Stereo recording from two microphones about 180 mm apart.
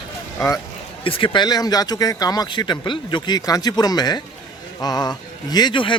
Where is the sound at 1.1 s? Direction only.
30° left (ahead or behind).